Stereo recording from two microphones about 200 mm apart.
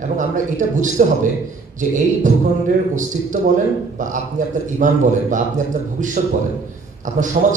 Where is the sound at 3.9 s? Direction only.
40° right (ahead or behind).